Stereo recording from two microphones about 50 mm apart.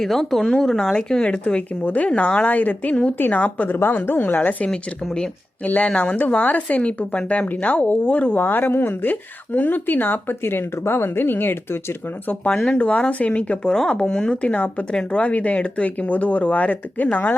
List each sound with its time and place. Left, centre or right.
0.0 s speech: centre
0.9 s a woman's voice: centre
3.8 s speech: left
5.6 s a woman's voice: left
8.4 s speech: left
12.7 s speech: left
13.7 s speech: centre
14.5 s speech: left